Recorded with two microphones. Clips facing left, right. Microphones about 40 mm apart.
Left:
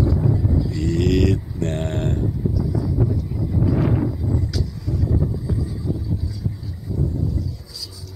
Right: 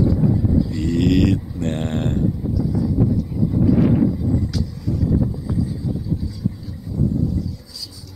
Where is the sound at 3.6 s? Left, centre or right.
Centre.